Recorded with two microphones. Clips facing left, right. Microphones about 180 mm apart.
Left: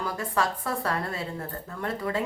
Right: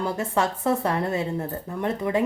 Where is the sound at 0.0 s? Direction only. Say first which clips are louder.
Right 4 dB; 25° right (ahead or behind).